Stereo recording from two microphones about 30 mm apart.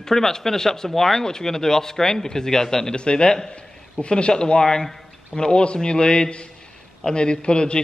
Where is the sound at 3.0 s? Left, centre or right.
Left.